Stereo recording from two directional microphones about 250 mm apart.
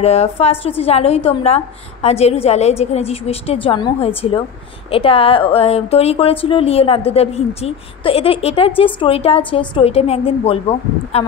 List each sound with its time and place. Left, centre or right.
0.0 s a woman's voice: left